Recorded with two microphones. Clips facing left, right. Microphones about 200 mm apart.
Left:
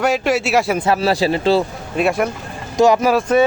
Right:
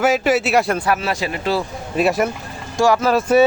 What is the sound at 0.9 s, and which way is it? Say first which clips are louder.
Speech: left 5 dB; 35° left (ahead or behind).